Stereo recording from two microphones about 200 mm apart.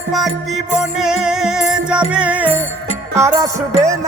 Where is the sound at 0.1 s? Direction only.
Centre (ahead or behind).